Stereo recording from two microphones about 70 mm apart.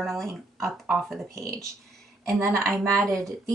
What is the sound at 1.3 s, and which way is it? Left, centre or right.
Speech, right.